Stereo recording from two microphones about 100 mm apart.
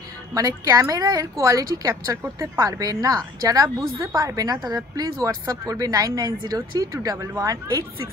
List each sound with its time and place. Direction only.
0.3 s speech: 35° right (ahead or behind)